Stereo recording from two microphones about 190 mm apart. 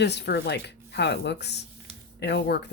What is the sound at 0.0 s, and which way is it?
Speech, 65° left (ahead or behind).